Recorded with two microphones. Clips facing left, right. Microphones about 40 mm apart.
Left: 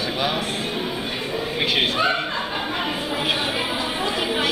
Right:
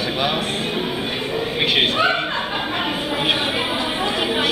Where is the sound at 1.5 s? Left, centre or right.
Centre.